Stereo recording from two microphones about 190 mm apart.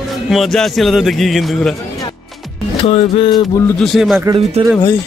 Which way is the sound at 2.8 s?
30° left (ahead or behind).